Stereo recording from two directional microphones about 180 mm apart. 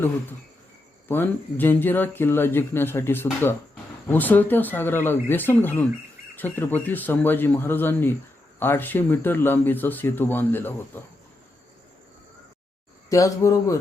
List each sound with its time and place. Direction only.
1.0 s speech: 10° left (ahead or behind)
13.1 s speech: 20° left (ahead or behind)